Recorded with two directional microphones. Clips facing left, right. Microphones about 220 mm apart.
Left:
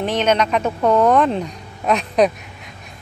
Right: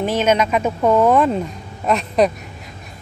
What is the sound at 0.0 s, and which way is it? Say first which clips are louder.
Speech: right 1 dB; 10° right (ahead or behind).